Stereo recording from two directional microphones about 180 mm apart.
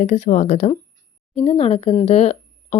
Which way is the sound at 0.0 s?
40° left (ahead or behind).